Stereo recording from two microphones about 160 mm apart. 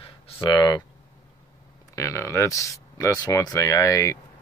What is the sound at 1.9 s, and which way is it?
Speech, 15° left (ahead or behind).